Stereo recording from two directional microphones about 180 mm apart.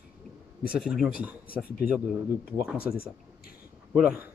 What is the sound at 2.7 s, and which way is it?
Speech, 55° left (ahead or behind).